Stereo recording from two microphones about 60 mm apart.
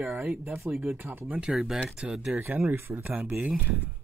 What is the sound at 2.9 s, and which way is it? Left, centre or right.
Speech, right.